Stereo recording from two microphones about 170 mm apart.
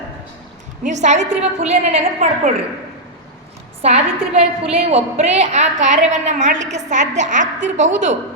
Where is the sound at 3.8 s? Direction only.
40° right (ahead or behind).